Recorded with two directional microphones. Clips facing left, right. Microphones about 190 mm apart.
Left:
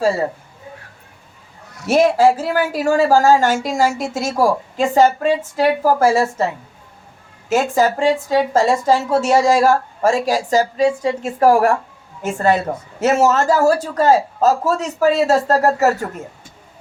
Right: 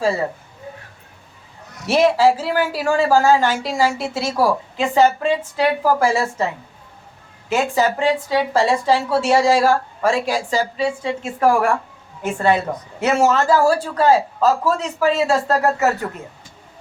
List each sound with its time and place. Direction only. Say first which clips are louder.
1.9 s a woman's voice: left 2 dB; 45° left (ahead or behind)
7.5 s a woman's voice: left 2 dB; 45° left (ahead or behind)